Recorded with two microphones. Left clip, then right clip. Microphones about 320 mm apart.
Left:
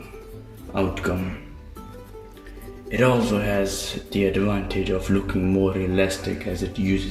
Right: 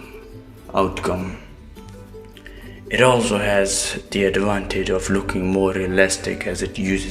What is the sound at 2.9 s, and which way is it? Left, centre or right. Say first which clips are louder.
Speech: right 5 dB; right.